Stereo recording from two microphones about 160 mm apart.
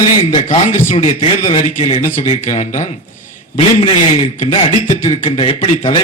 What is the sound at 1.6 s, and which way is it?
A man's voice, 55° left (ahead or behind).